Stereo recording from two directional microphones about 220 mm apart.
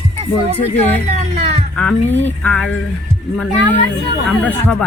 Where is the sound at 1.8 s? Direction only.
5° left (ahead or behind).